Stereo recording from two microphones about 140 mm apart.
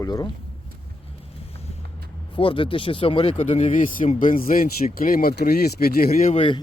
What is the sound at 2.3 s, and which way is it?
Speech, 40° left (ahead or behind).